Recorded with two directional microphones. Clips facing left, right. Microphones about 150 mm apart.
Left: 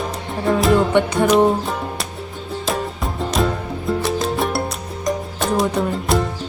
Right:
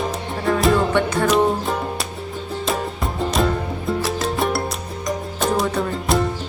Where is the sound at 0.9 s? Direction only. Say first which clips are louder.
Left 3 dB; 20° left (ahead or behind).